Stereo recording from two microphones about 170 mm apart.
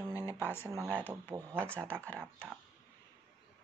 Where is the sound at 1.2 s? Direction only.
15° right (ahead or behind).